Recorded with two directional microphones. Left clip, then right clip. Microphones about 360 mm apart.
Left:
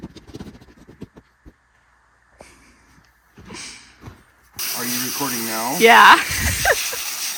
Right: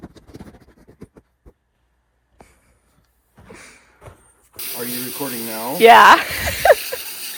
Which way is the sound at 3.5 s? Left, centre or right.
Centre.